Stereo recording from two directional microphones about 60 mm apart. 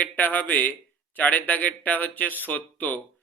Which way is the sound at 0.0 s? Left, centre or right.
Left.